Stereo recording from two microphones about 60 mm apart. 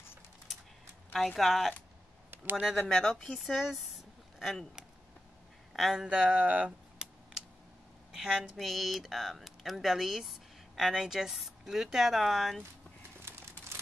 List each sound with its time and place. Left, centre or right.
1.1 s speech: centre
2.3 s a sound: right
2.7 s speech: centre
5.7 s speech: centre
6.0 s speech: centre
8.1 s speech: centre
13.2 s crumpling: right